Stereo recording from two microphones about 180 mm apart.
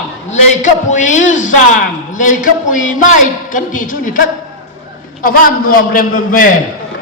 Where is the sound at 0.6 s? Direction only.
45° left (ahead or behind).